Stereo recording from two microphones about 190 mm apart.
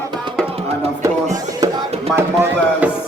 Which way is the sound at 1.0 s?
15° right (ahead or behind).